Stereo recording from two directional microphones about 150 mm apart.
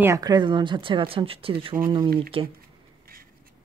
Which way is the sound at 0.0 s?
20° right (ahead or behind).